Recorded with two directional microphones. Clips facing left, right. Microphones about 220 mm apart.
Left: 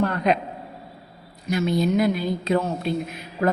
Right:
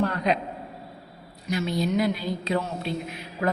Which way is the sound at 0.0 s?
55° left (ahead or behind).